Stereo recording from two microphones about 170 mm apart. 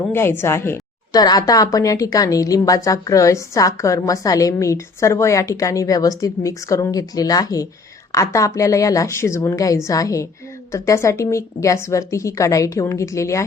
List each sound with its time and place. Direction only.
0.1 s a woman's voice: 15° left (ahead or behind)